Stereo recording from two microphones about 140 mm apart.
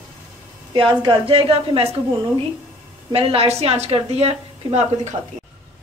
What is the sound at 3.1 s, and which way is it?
A woman's voice, 45° right (ahead or behind).